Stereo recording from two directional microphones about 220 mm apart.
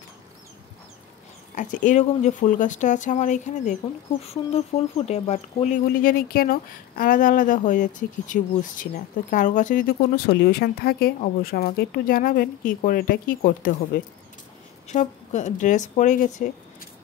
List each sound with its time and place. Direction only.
1.5 s speech: 35° left (ahead or behind)
14.9 s speech: 35° left (ahead or behind)